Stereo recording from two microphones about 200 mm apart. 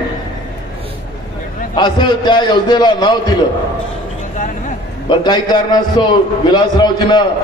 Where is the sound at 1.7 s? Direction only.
20° left (ahead or behind).